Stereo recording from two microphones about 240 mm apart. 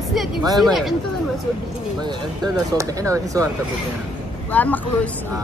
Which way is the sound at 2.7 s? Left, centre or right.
Centre.